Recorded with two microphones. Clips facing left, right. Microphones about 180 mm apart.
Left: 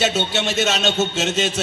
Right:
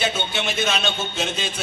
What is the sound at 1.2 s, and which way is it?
Speech, 80° left.